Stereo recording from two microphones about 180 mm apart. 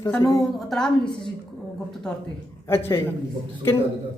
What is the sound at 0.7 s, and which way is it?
Speech, 5° left (ahead or behind).